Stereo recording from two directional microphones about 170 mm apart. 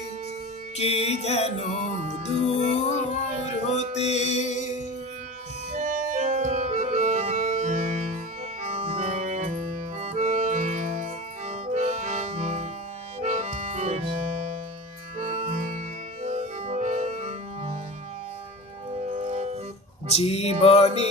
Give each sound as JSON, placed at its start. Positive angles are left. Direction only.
{"t": 0.7, "sound": "music", "side_deg": 35}
{"t": 5.7, "sound": "organ", "side_deg": -50}
{"t": 8.6, "sound": "music", "side_deg": -40}
{"t": 15.2, "sound": "music", "side_deg": -40}
{"t": 18.9, "sound": "music", "side_deg": -40}
{"t": 20.1, "sound": "music", "side_deg": 35}